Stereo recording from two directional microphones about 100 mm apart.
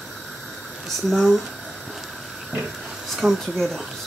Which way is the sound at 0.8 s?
Centre (ahead or behind).